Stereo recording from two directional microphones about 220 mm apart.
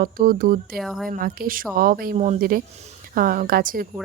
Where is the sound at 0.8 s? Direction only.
Centre (ahead or behind).